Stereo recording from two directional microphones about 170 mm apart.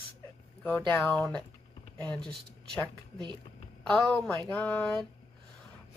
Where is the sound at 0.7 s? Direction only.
10° left (ahead or behind).